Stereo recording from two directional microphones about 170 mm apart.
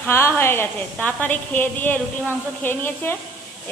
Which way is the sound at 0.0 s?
15° left (ahead or behind).